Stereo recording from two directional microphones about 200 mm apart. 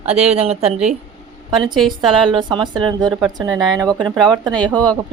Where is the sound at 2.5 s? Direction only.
20° right (ahead or behind).